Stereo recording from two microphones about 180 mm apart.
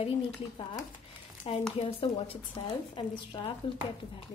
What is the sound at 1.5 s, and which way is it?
A woman's voice, 30° left (ahead or behind).